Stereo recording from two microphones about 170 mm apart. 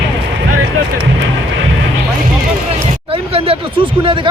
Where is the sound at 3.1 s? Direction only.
35° right (ahead or behind).